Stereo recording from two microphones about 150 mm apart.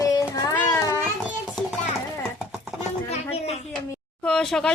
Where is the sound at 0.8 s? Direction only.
25° left (ahead or behind).